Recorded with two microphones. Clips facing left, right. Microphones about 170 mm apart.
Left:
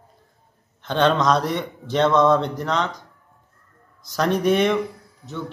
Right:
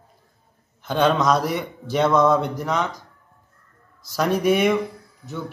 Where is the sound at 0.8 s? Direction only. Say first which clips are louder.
Even; 5° right (ahead or behind).